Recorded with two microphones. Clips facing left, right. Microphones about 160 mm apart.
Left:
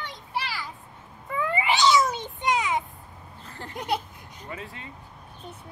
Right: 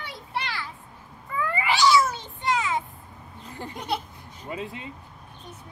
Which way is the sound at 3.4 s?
15° right (ahead or behind).